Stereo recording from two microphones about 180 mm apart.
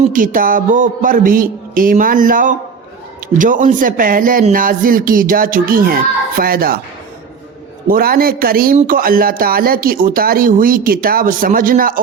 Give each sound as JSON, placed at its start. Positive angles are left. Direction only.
{"t": 0.0, "sound": "speech", "side_deg": -45}
{"t": 7.9, "sound": "speech", "side_deg": -55}